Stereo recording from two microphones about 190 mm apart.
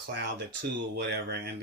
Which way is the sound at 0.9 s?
60° right (ahead or behind).